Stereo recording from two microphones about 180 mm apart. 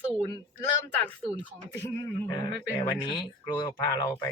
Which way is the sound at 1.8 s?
15° left (ahead or behind).